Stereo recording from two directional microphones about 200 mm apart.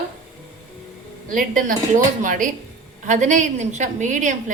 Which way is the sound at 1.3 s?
40° right (ahead or behind).